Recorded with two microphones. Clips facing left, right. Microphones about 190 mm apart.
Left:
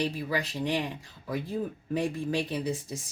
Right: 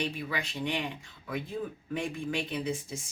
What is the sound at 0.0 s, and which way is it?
Speech, 35° left (ahead or behind).